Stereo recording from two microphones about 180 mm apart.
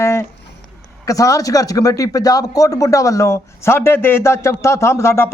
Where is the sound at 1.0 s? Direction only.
20° left (ahead or behind).